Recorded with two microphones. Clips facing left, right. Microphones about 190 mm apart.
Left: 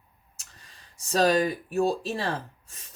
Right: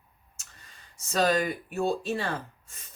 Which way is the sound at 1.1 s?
35° left (ahead or behind).